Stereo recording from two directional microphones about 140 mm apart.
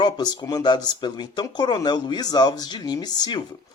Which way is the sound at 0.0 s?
30° left (ahead or behind).